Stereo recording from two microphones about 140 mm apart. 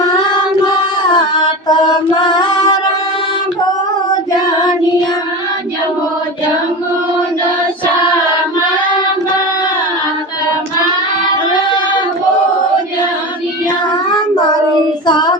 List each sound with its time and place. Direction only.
1.0 s mantra: 30° left (ahead or behind)
2.2 s music: 30° left (ahead or behind)
13.9 s child singing: 30° left (ahead or behind)